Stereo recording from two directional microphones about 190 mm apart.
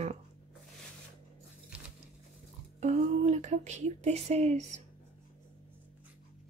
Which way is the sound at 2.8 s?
35° right (ahead or behind).